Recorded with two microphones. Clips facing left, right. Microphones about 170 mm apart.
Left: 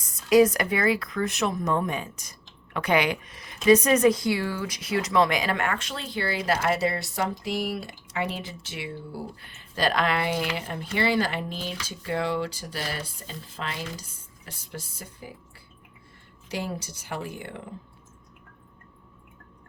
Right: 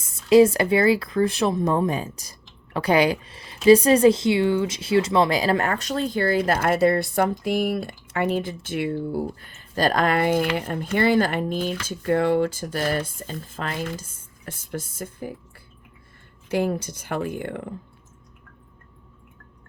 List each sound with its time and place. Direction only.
0.0 s speech: 25° right (ahead or behind); by 15.3 s 50° right (ahead or behind)
16.5 s speech: 55° right (ahead or behind)